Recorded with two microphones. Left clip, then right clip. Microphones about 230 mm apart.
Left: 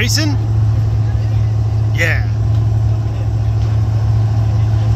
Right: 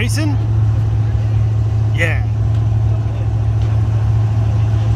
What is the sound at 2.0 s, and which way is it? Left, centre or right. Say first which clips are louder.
Speech: left 2 dB; centre.